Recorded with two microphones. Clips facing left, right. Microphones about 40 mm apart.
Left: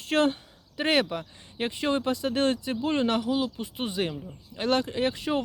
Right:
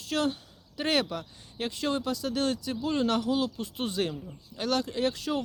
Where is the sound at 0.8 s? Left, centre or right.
Left.